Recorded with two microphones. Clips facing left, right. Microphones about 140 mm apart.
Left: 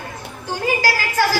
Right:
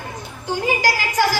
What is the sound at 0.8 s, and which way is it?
Speech, 15° right (ahead or behind).